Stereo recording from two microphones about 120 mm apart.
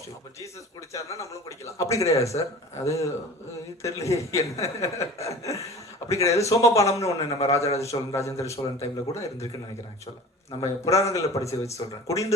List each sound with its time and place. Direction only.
0.9 s speech: 25° left (ahead or behind)
7.3 s a man's voice: 60° left (ahead or behind)
7.8 s speech: 25° left (ahead or behind)
10.6 s speech: 25° left (ahead or behind)